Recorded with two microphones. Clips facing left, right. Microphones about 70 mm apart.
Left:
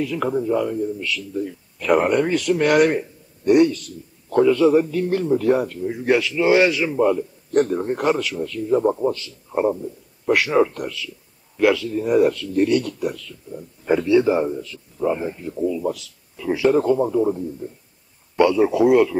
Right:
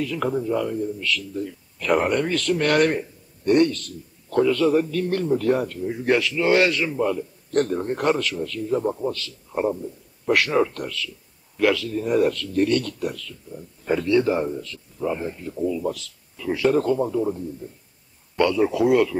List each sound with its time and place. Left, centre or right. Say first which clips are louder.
0.0 s a man's voice: left 2 dB; centre
8.6 s a man's voice: left 6 dB; centre
10.2 s a man's voice: left 3 dB; centre
18.8 s speech: left 4 dB; centre